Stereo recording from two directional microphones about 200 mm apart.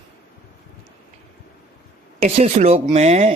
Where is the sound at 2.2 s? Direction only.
35° right (ahead or behind).